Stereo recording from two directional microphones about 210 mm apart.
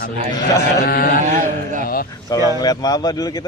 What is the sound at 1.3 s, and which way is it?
Speech, 40° right (ahead or behind).